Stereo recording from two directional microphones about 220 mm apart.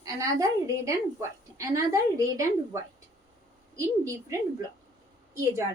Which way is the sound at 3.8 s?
15° right (ahead or behind).